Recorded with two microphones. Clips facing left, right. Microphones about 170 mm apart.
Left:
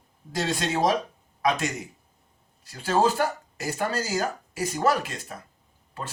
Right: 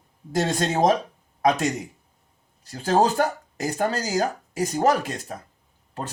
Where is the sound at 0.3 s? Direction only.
45° right (ahead or behind).